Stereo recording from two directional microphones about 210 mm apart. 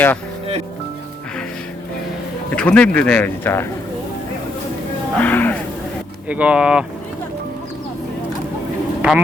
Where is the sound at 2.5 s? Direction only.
5° left (ahead or behind).